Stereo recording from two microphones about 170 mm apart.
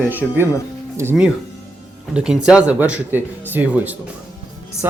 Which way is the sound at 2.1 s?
5° right (ahead or behind).